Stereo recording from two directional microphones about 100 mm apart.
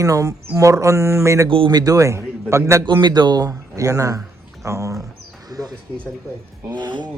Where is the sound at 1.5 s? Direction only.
65° right (ahead or behind).